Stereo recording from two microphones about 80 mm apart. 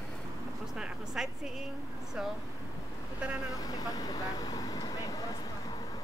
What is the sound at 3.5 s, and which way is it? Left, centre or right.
Speech, left.